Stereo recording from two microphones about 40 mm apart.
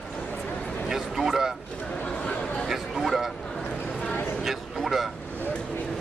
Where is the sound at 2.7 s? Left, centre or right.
Centre.